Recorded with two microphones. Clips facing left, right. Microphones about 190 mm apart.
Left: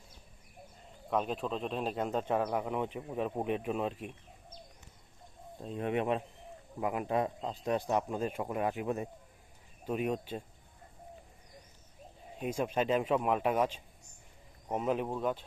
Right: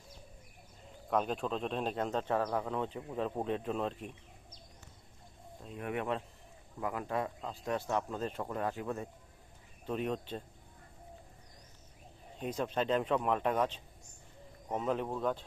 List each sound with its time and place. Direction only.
1.1 s speech: centre (ahead or behind)
5.6 s speech: 25° left (ahead or behind); by 10.4 s 10° left (ahead or behind)
12.4 s speech: 10° left (ahead or behind)